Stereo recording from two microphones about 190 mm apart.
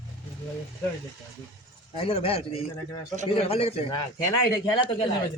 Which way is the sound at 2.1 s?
30° left (ahead or behind).